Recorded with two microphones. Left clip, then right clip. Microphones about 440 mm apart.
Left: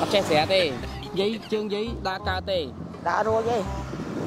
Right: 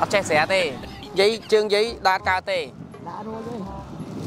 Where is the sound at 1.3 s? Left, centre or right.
Right.